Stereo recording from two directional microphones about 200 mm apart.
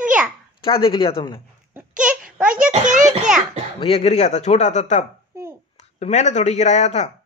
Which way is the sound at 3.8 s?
35° left (ahead or behind).